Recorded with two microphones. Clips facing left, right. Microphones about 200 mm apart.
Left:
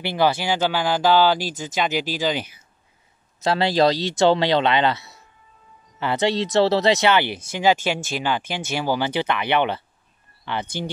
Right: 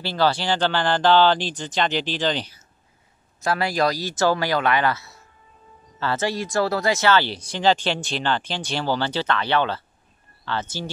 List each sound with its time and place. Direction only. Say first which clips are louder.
0.0 s speech: left 1 dB; 15° left (ahead or behind)
3.4 s speech: left 4 dB; 25° left (ahead or behind)